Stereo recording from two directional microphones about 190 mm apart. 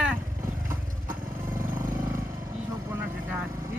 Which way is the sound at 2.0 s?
15° right (ahead or behind).